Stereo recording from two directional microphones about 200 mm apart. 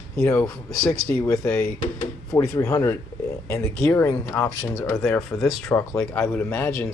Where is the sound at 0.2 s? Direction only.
15° left (ahead or behind).